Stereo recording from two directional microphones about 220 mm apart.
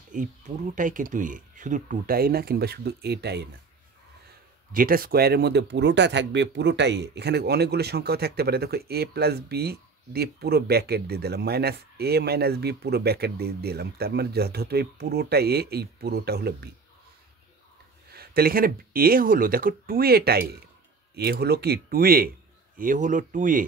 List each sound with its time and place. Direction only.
0.1 s speech: 35° right (ahead or behind)
4.7 s speech: 40° right (ahead or behind)
18.1 s speech: 45° right (ahead or behind)